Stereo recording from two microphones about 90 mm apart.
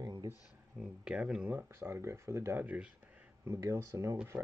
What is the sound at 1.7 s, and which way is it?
Speech, 30° right (ahead or behind).